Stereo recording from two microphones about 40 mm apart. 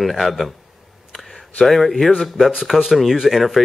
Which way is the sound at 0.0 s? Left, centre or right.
Centre.